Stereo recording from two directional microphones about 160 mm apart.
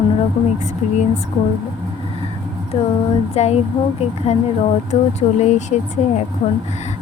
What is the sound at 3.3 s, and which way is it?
Speech, 40° left (ahead or behind).